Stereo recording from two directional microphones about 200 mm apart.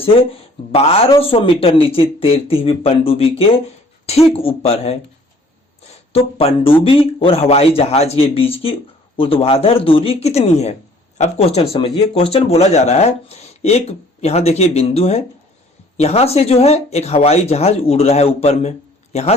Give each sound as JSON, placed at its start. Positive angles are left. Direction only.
{"t": 0.1, "sound": "speech", "side_deg": 30}
{"t": 6.1, "sound": "speech", "side_deg": 30}